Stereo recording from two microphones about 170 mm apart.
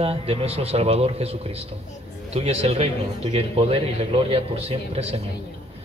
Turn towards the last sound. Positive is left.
turn(degrees=-35)  # may be behind; listen again after turning